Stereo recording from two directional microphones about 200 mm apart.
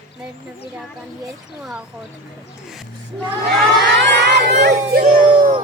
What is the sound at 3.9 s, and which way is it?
Crowd, 60° right (ahead or behind).